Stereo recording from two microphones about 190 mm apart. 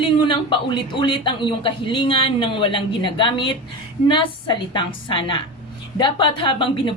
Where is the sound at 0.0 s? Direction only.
25° left (ahead or behind).